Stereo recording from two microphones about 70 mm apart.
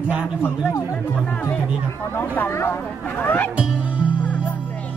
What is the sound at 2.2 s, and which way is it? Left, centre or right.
Speech, left.